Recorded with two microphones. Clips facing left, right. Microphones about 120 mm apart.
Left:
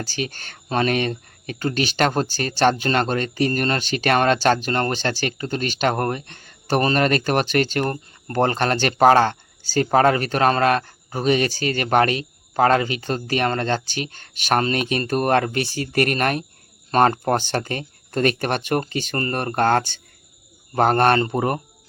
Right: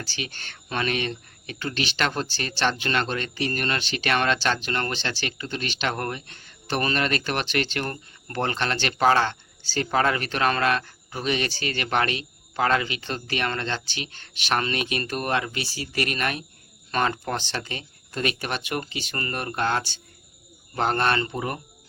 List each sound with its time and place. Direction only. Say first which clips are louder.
0.0 s speech: left 7 dB; 45° left (ahead or behind)